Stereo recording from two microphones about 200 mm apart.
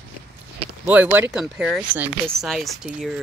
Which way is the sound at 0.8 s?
10° right (ahead or behind).